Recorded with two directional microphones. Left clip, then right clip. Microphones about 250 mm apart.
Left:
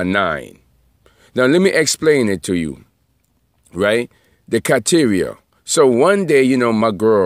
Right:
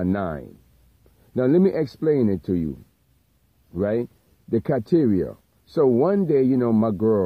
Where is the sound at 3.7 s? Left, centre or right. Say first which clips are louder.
Left 8 dB; left.